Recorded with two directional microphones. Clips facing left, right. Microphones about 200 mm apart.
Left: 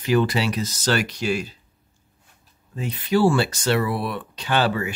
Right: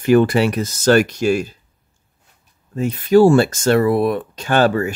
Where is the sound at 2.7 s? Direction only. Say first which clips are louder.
Right 9 dB; 45° right (ahead or behind).